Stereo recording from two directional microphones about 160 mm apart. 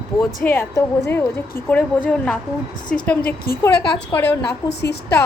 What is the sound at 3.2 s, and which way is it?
Speech, 70° left (ahead or behind).